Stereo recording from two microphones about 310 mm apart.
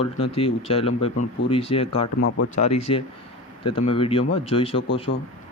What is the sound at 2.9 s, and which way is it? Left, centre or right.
Speech, centre.